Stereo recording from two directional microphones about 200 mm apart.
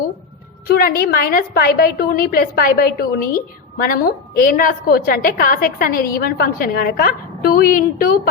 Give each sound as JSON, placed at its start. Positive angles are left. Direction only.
{"t": 0.7, "sound": "a woman's voice", "side_deg": 50}